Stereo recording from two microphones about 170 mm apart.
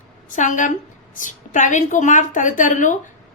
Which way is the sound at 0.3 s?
50° left (ahead or behind).